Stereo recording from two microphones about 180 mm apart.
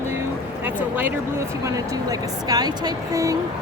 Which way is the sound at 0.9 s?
15° right (ahead or behind).